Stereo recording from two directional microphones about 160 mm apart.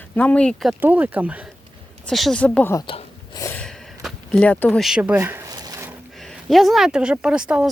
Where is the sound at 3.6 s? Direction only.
5° left (ahead or behind); by 5.9 s 25° right (ahead or behind).